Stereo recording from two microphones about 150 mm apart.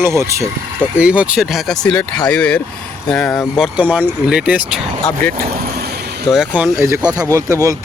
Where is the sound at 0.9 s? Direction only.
10° right (ahead or behind).